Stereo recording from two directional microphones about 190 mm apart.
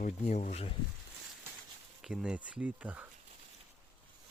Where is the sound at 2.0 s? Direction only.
5° right (ahead or behind).